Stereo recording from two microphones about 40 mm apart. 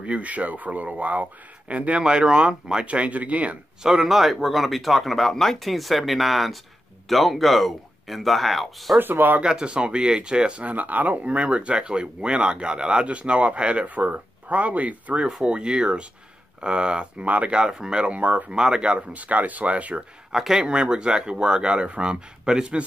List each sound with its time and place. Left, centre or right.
0.0 s speech: right
2.0 s speech: right
3.8 s speech: centre
9.1 s speech: right
9.4 s speech: right
10.7 s speech: right
13.8 s speech: right
15.4 s speech: right
17.6 s speech: centre
18.0 s speech: right
18.5 s speech: right
19.1 s speech: right
20.2 s speech: centre
20.6 s speech: right